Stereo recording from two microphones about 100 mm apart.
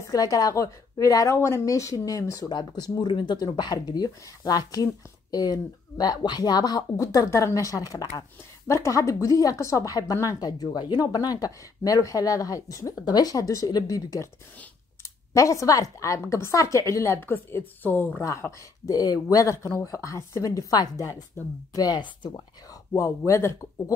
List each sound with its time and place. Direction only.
0.0 s speech: 35° left (ahead or behind)
15.3 s speech: 30° left (ahead or behind)
18.2 s speech: 30° left (ahead or behind); by 22.3 s 50° left (ahead or behind)
22.9 s speech: 30° left (ahead or behind)